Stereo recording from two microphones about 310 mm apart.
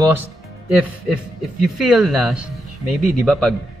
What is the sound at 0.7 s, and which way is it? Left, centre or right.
A man's voice, centre.